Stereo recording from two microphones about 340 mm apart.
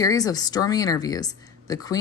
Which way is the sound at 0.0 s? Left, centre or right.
Centre.